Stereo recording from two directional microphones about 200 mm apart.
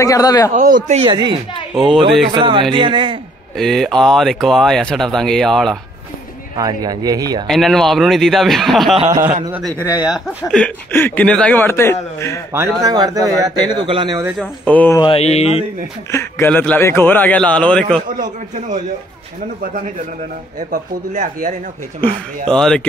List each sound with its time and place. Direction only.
0.0 s speech: 15° left (ahead or behind)
0.5 s a man's voice: 40° right (ahead or behind)
1.1 s speech: 20° right (ahead or behind)
3.5 s speech: centre (ahead or behind)
6.5 s speech: 20° right (ahead or behind)
7.4 s speech: centre (ahead or behind)
9.0 s speech: 10° right (ahead or behind); by 12.4 s 10° left (ahead or behind)
12.5 s speech: 20° right (ahead or behind)
14.4 s speech: 10° left (ahead or behind)
15.0 s mantra: 30° left (ahead or behind)
16.1 s speech: 10° left (ahead or behind)
20.5 s a man's voice: 40° right (ahead or behind)
22.5 s speech: 5° left (ahead or behind)